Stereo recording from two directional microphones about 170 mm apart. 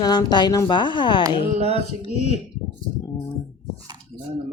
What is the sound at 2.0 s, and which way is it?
Speech, 40° left (ahead or behind).